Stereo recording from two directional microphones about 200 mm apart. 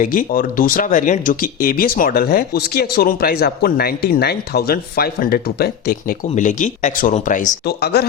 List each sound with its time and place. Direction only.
0.0 s speech: 45° left (ahead or behind)
6.3 s speech: 40° left (ahead or behind)